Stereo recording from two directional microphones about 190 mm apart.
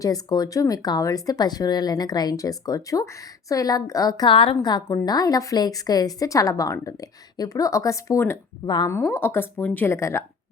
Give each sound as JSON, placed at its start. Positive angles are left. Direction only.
{"t": 0.0, "sound": "a woman's voice", "side_deg": 20}
{"t": 9.0, "sound": "a woman's voice", "side_deg": 10}